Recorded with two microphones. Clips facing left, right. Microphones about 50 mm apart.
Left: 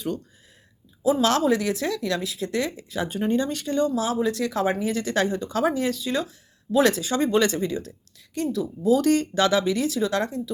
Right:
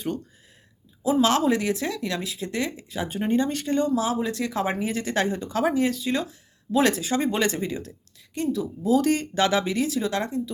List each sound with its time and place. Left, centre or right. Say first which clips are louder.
1.2 s speech: right 1 dB; right